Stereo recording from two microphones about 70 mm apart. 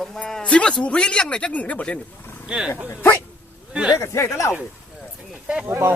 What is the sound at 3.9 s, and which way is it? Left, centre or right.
Speech, left.